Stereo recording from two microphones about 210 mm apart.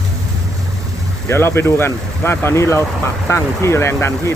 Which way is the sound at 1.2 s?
10° left (ahead or behind).